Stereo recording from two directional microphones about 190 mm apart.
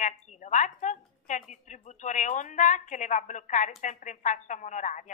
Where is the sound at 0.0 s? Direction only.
40° left (ahead or behind).